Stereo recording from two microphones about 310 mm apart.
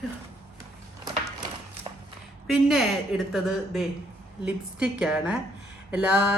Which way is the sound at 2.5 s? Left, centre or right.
Centre.